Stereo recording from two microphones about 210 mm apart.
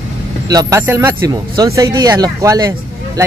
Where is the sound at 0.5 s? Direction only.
15° right (ahead or behind).